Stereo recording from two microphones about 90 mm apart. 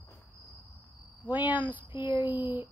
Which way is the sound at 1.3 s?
20° right (ahead or behind).